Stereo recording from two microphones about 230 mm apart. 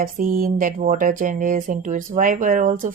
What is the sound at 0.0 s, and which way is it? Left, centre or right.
Speech, right.